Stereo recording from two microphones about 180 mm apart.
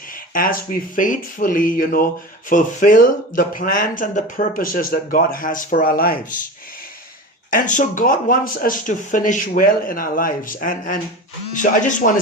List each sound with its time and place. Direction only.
0.1 s speech: 50° left (ahead or behind)
7.5 s speech: 45° left (ahead or behind)